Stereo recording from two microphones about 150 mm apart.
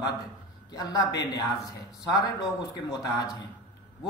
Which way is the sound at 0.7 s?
25° left (ahead or behind).